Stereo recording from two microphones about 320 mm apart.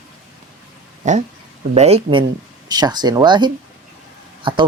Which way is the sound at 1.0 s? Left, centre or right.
Right.